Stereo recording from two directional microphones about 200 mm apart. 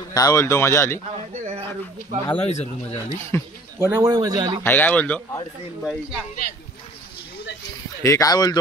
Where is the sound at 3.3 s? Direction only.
10° left (ahead or behind).